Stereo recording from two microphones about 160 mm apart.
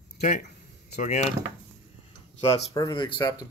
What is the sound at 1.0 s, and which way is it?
Speech, 50° left (ahead or behind).